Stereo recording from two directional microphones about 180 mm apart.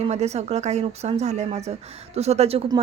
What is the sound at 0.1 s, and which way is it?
A woman's voice, 35° right (ahead or behind).